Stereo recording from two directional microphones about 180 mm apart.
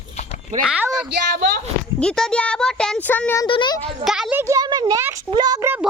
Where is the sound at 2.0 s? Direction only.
5° left (ahead or behind).